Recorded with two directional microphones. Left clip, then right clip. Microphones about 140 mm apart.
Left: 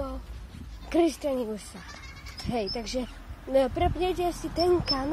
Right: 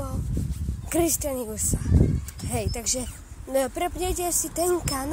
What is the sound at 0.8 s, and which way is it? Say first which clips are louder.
Speech: even; 25° right (ahead or behind).